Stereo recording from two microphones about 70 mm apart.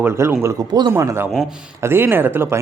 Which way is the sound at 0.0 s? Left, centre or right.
Right.